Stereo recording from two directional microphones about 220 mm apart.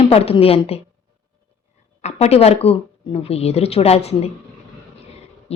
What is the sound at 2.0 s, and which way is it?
Speech, 30° left (ahead or behind).